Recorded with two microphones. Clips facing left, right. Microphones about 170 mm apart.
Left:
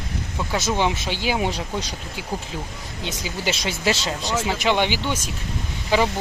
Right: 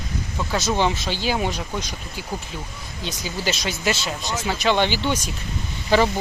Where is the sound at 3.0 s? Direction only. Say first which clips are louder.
Even; 25° left (ahead or behind).